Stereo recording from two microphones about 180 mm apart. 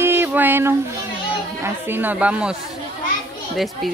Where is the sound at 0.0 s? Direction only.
10° right (ahead or behind).